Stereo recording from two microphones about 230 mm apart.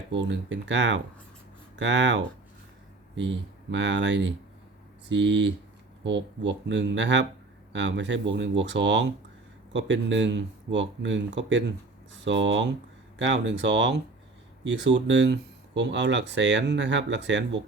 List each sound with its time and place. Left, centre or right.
0.1 s speech: right